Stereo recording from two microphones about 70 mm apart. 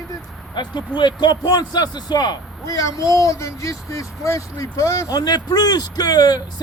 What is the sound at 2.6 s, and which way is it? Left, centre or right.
Speech, left.